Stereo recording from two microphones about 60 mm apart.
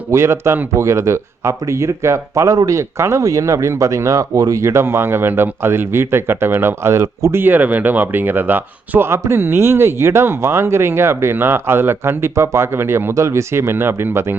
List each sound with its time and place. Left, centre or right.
0.1 s speech: right
9.0 s speech: right